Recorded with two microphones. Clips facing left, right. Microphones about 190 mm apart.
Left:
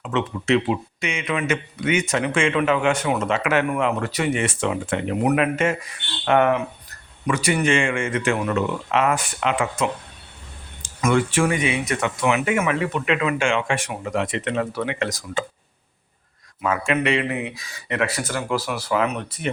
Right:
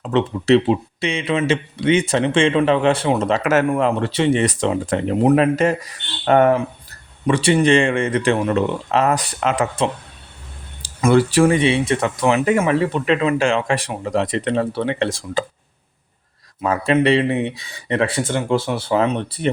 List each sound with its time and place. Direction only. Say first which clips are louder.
0.0 s speech: right 5 dB; 35° right (ahead or behind)
16.6 s speech: right 5 dB; 35° right (ahead or behind)